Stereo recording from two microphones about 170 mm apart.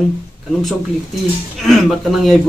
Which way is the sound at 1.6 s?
Centre (ahead or behind).